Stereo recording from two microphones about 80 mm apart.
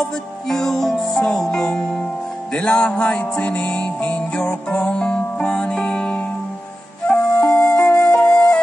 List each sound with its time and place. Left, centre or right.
0.5 s music: centre
7.3 s music: left
7.6 s music: centre